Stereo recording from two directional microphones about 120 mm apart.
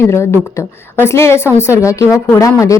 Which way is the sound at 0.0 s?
20° left (ahead or behind).